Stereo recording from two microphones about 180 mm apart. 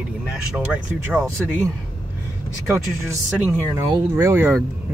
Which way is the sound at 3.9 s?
15° right (ahead or behind).